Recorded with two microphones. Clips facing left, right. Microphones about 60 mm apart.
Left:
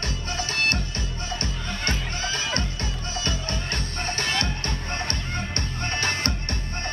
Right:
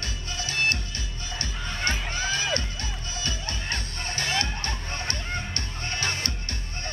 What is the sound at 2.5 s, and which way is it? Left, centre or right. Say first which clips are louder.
Music: left 1 dB; left.